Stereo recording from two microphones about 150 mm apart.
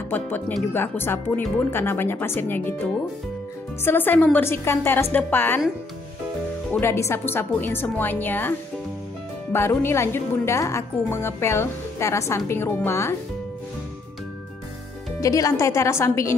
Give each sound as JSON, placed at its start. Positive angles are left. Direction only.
{"t": 0.1, "sound": "a woman's voice", "side_deg": 15}
{"t": 6.7, "sound": "a woman's voice", "side_deg": 15}
{"t": 15.1, "sound": "speech", "side_deg": 20}